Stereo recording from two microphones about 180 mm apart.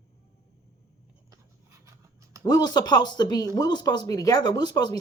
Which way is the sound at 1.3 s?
15° right (ahead or behind).